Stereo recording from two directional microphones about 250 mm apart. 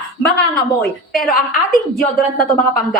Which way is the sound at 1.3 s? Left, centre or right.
Left.